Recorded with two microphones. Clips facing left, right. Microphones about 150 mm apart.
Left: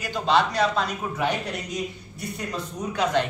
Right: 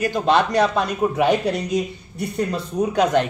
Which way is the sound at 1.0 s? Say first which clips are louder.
Right 9 dB; 75° right (ahead or behind).